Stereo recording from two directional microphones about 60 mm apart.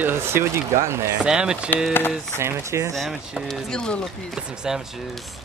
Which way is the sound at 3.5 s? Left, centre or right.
Centre.